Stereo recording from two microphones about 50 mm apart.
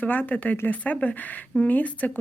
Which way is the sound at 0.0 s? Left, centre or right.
Left.